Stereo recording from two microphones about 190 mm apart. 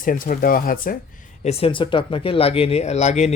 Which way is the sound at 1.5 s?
30° left (ahead or behind).